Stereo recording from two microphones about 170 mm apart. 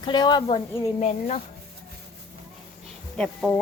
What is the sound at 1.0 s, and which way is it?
Speech, 40° left (ahead or behind).